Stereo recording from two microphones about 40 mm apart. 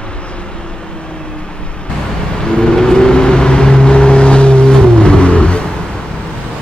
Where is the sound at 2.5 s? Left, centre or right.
Centre.